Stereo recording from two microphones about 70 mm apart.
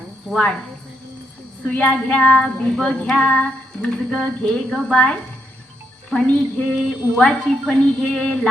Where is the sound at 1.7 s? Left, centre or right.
Left.